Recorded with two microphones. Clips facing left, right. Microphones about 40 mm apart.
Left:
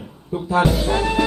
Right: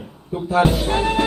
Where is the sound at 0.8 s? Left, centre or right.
Right.